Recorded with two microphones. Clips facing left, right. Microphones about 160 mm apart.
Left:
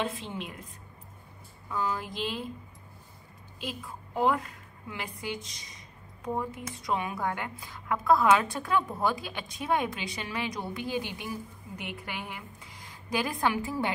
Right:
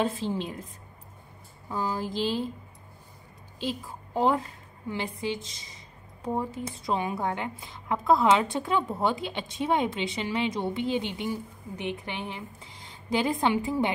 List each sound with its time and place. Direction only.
0.0 s speech: 35° right (ahead or behind)
1.7 s speech: 30° right (ahead or behind)
3.5 s a woman's voice: 30° right (ahead or behind)